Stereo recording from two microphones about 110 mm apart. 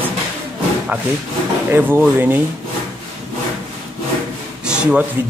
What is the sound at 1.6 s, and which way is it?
Speech, 20° right (ahead or behind).